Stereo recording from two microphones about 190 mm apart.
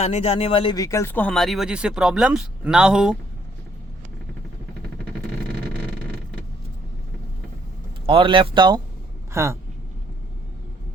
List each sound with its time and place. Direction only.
0.0 s speech: 35° left (ahead or behind); by 3.2 s 5° right (ahead or behind)
8.0 s speech: 30° right (ahead or behind)